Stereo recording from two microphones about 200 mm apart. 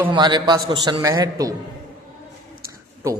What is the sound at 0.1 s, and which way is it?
A man's voice, 20° right (ahead or behind).